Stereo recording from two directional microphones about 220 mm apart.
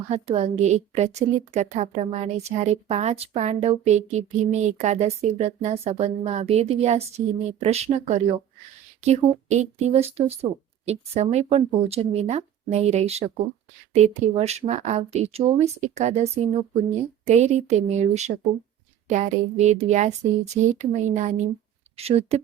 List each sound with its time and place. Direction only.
0.1 s a woman's voice: 30° right (ahead or behind)